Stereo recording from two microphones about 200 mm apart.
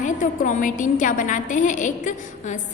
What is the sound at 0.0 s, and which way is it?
A woman's voice, 40° left (ahead or behind).